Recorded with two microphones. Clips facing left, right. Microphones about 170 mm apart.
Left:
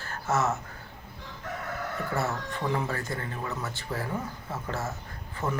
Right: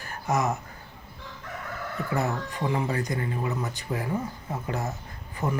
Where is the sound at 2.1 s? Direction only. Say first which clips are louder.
Right 4 dB; 15° right (ahead or behind).